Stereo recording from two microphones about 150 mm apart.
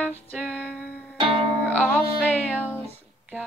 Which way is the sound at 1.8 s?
5° left (ahead or behind).